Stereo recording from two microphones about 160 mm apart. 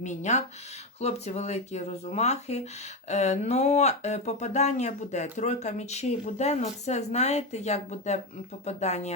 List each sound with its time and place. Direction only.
0.0 s speech: 45° left (ahead or behind)